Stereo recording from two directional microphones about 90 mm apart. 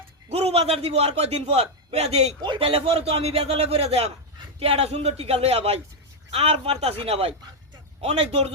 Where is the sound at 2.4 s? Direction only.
75° right (ahead or behind).